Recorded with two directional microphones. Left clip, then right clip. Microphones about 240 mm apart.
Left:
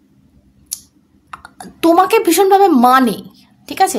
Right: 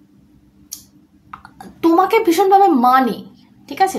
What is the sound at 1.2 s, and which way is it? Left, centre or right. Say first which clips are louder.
A woman's voice: left 3 dB; left.